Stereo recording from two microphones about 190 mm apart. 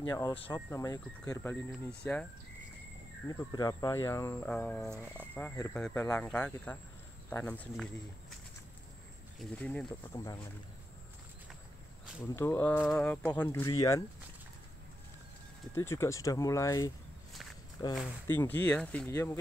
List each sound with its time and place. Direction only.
0.0 s speech: 20° left (ahead or behind)
3.3 s speech: 20° left (ahead or behind)
9.4 s speech: 5° left (ahead or behind)
10.1 s speech: 20° left (ahead or behind)
12.4 s speech: 15° left (ahead or behind)
15.7 s speech: 15° left (ahead or behind)
18.3 s speech: 10° left (ahead or behind)